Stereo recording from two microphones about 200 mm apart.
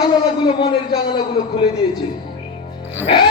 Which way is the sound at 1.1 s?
20° left (ahead or behind).